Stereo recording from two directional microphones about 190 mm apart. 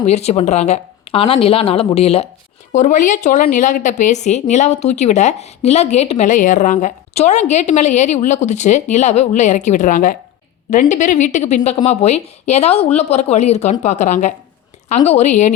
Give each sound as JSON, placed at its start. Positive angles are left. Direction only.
{"t": 0.1, "sound": "a woman's voice", "side_deg": 35}
{"t": 2.7, "sound": "a woman's voice", "side_deg": 40}